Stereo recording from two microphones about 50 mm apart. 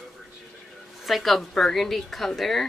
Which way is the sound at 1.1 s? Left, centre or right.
Centre.